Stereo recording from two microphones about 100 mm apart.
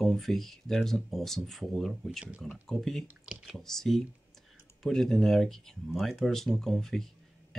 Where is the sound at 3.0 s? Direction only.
10° right (ahead or behind).